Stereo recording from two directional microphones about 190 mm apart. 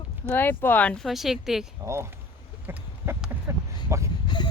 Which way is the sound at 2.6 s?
10° right (ahead or behind).